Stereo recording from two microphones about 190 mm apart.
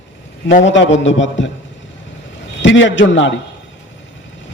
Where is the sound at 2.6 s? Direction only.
75° left (ahead or behind).